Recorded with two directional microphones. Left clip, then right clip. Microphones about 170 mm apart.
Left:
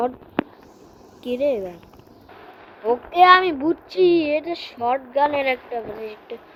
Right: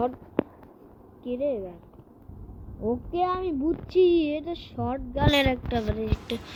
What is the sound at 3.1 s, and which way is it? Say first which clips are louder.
Speech: left 16 dB; 60° left (ahead or behind).